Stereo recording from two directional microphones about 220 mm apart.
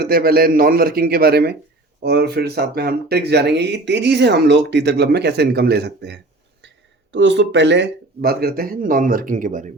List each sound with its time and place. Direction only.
0.0 s speech: 40° right (ahead or behind)